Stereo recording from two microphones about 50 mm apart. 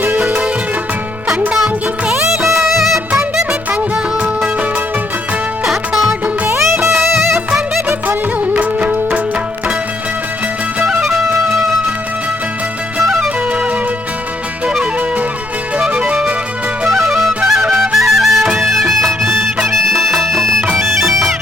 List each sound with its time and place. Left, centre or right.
1.5 s music: centre
5.6 s music: centre
6.6 s music: right
8.5 s music: right
10.8 s music: centre
13.1 s music: centre
16.8 s music: centre
21.0 s bagpipes: centre